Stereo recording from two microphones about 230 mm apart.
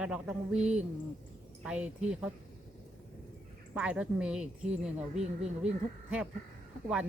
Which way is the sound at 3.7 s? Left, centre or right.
Centre.